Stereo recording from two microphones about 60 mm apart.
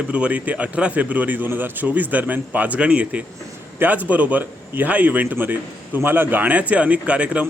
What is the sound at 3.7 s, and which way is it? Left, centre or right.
A man's voice, right.